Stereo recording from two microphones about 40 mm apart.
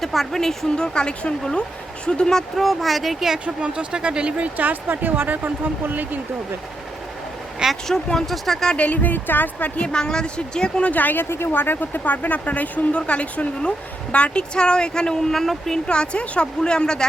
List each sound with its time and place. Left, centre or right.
0.0 s speech: centre
0.9 s a woman's voice: left
2.6 s speech: centre
3.4 s speech: right
4.5 s speech: right
7.9 s speech: centre
8.7 s speech: left
9.8 s a woman's voice: centre
10.8 s speech: left
11.3 s a woman's voice: left
15.3 s speech: centre
15.9 s a woman's voice: left